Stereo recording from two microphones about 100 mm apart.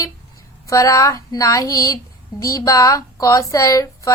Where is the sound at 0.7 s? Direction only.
35° left (ahead or behind).